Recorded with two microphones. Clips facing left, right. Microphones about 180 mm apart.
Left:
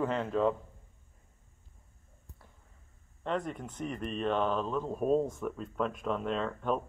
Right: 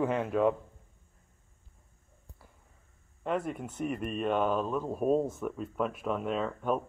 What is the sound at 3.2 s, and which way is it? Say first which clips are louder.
Speech: right 2 dB; 5° right (ahead or behind).